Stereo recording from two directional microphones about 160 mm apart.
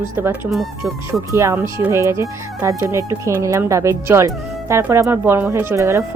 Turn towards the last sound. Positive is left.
turn(degrees=-15)  # may be behind; listen again after turning